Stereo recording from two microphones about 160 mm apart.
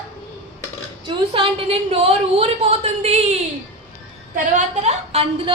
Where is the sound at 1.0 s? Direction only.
35° right (ahead or behind).